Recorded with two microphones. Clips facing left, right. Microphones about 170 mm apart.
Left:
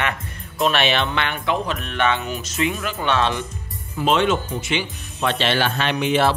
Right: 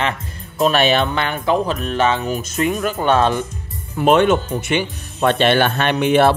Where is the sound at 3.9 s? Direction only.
55° right (ahead or behind).